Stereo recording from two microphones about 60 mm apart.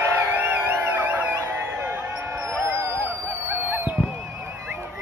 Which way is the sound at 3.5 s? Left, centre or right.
Right.